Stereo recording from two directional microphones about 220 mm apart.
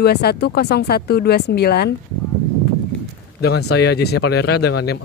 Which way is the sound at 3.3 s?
50° left (ahead or behind).